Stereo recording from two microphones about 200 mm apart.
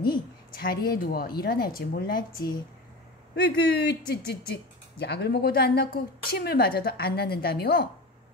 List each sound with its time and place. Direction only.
0.5 s speech: 50° left (ahead or behind)